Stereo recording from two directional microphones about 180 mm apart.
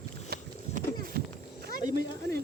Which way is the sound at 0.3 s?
55° right (ahead or behind).